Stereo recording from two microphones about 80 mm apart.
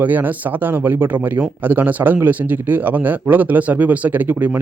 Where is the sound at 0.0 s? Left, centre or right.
Right.